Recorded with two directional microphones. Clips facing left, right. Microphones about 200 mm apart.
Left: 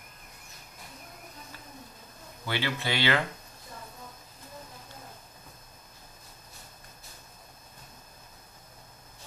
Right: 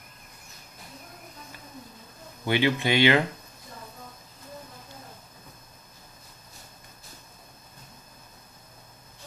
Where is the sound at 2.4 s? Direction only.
20° right (ahead or behind).